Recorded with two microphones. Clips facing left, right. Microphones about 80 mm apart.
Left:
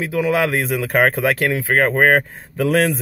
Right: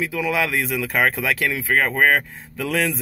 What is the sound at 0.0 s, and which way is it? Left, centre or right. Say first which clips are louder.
Speech: left 4 dB; left.